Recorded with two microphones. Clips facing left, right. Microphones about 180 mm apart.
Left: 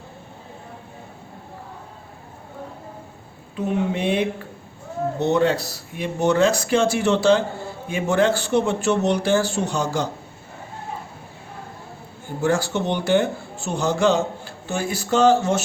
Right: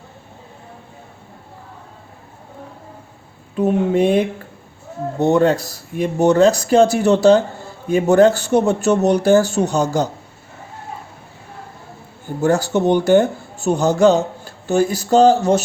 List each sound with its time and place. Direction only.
3.5 s speech: 45° right (ahead or behind)
5.2 s speech: 45° right (ahead or behind)
12.4 s speech: 40° right (ahead or behind)